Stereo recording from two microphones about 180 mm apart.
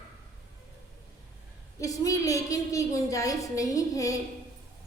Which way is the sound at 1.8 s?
20° left (ahead or behind).